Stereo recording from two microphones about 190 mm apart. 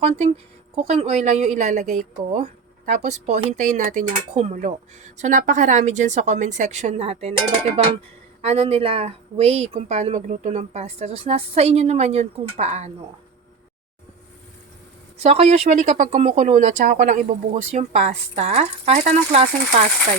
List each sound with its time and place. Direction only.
0.8 s a woman's voice: 35° right (ahead or behind)
8.4 s a woman's voice: 30° right (ahead or behind)
15.2 s a woman's voice: 35° right (ahead or behind)